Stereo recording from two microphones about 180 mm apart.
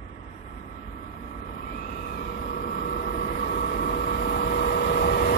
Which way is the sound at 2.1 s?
50° left (ahead or behind).